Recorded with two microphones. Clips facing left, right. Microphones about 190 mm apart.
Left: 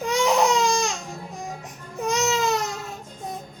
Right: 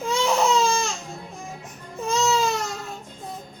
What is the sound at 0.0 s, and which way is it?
Baby cry, 15° left (ahead or behind).